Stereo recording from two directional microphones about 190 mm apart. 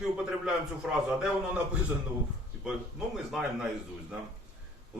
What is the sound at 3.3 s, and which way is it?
Speech, centre (ahead or behind).